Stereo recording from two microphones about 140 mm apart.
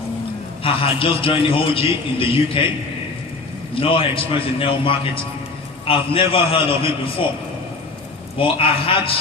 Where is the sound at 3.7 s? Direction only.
40° left (ahead or behind).